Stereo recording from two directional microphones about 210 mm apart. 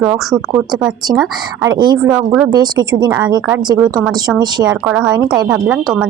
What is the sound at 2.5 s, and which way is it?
A woman's voice, 20° right (ahead or behind).